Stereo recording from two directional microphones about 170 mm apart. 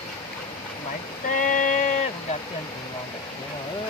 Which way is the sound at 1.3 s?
50° left (ahead or behind).